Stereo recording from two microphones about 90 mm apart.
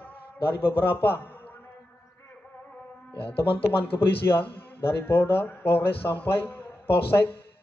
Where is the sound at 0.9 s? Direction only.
20° left (ahead or behind).